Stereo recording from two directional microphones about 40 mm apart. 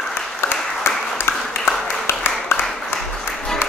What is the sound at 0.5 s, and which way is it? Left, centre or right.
Applause, left.